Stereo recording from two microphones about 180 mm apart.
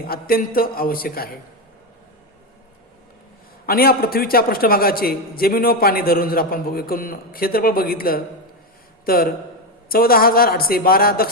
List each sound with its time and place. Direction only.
0.1 s a man's voice: 55° left (ahead or behind)
3.7 s a man's voice: 55° left (ahead or behind)